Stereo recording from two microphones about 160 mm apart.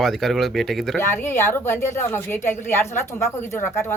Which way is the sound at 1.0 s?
15° left (ahead or behind).